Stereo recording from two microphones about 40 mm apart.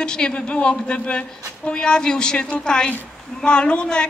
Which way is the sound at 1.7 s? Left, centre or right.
Left.